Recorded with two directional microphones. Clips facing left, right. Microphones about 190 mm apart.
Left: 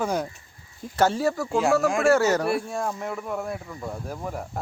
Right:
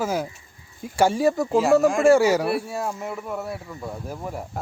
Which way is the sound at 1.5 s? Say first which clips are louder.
Right 3 dB; centre (ahead or behind).